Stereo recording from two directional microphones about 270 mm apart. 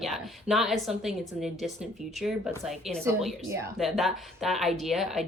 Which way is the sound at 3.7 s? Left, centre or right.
Centre.